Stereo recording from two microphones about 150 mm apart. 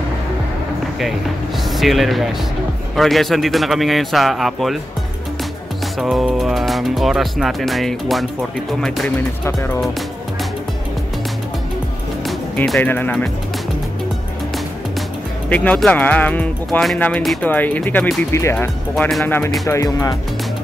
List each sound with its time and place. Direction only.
1.6 s speech: centre (ahead or behind)
5.9 s speech: centre (ahead or behind)
9.4 s speech: 20° left (ahead or behind)
12.6 s speech: 10° left (ahead or behind)
15.5 s speech: 10° left (ahead or behind)